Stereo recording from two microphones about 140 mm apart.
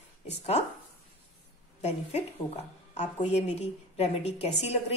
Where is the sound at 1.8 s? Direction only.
55° left (ahead or behind).